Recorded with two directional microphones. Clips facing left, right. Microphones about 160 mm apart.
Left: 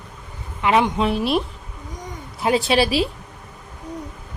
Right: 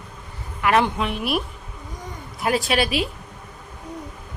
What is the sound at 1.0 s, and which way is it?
A woman's voice, 30° left (ahead or behind).